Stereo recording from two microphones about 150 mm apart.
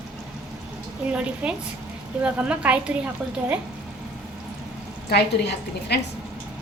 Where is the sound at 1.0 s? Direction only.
10° right (ahead or behind).